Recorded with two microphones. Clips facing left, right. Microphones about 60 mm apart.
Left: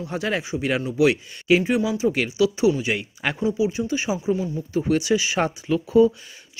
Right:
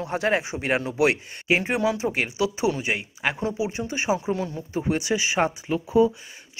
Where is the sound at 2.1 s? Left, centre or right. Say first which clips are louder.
Left 4 dB; right.